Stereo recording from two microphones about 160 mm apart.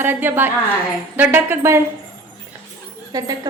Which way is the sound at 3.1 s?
20° right (ahead or behind).